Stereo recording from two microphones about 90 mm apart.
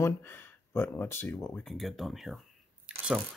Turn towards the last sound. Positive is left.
turn(degrees=-10)  # may be behind; listen again after turning